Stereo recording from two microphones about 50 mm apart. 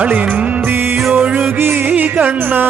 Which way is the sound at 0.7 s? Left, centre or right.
Right.